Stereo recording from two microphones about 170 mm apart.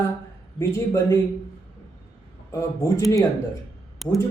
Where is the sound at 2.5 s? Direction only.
20° left (ahead or behind).